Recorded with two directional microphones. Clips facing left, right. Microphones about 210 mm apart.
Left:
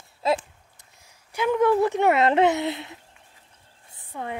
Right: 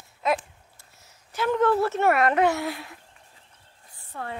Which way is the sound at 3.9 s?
15° left (ahead or behind).